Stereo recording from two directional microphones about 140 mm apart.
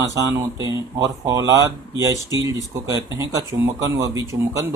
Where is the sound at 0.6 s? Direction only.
25° right (ahead or behind).